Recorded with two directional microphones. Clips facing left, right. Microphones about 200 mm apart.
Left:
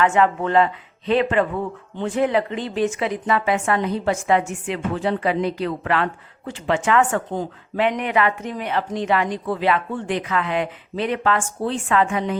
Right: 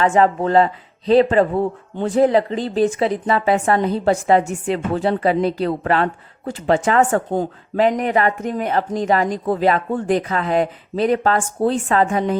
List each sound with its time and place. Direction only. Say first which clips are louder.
0.0 s speech: right 3 dB; 35° right (ahead or behind)